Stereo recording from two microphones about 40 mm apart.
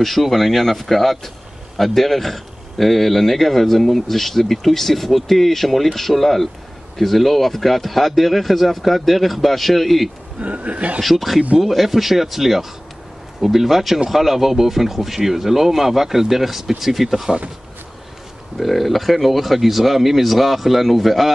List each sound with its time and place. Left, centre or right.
0.0 s a man's voice: centre
10.4 s speech: right
11.0 s a man's voice: centre
18.6 s a man's voice: centre